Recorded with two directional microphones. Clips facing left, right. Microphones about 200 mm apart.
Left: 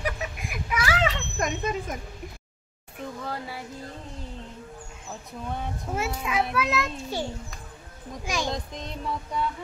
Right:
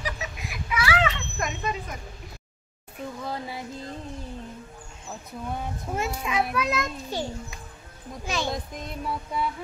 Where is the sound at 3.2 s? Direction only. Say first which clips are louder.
Right 2 dB; 15° right (ahead or behind).